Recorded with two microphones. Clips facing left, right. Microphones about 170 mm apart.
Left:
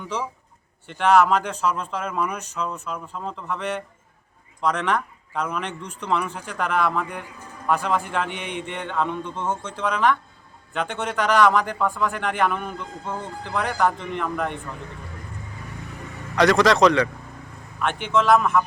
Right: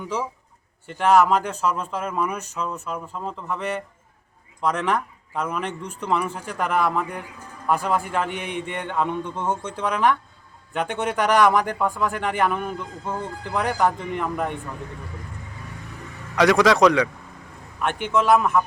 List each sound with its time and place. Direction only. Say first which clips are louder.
0.0 s speech: right 1 dB; 5° right (ahead or behind)
8.4 s mantra: right 1 dB; 45° right (ahead or behind)
8.8 s a man's voice: right 1 dB; 15° right (ahead or behind)
16.3 s a man's voice: even; 10° right (ahead or behind)